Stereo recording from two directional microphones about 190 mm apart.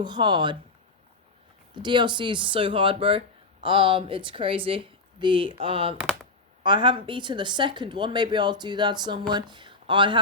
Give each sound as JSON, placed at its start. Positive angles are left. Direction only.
{"t": 0.0, "sound": "speech", "side_deg": -25}
{"t": 1.7, "sound": "speech", "side_deg": -25}